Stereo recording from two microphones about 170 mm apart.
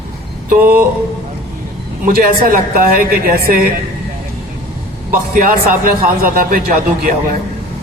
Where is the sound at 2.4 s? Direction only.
60° right (ahead or behind).